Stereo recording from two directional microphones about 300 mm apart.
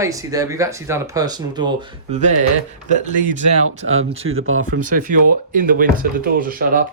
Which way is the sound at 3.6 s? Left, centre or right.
Right.